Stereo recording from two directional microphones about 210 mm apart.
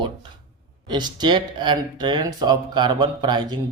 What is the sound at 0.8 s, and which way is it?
Speech, 20° right (ahead or behind).